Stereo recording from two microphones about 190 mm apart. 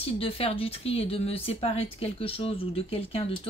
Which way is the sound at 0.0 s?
30° left (ahead or behind).